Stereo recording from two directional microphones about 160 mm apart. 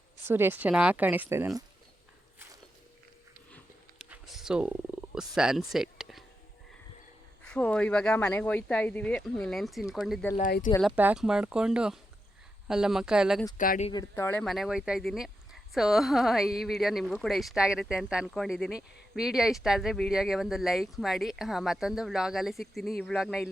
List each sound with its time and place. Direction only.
0.3 s speech: 15° right (ahead or behind)
4.1 s a sound: 5° right (ahead or behind)
7.4 s speech: 5° left (ahead or behind)
13.6 s speech: 55° left (ahead or behind)
13.9 s speech: 15° left (ahead or behind)
14.4 s speech: centre (ahead or behind)